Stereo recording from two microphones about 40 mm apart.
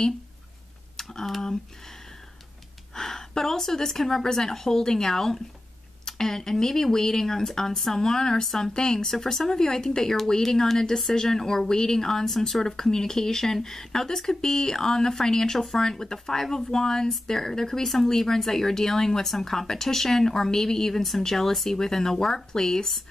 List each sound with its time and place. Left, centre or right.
0.9 s speech: centre
2.9 s speech: centre
8.5 s speech: centre
12.6 s speech: centre